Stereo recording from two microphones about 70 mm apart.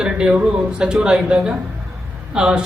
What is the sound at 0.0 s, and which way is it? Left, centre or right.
A man's voice, centre.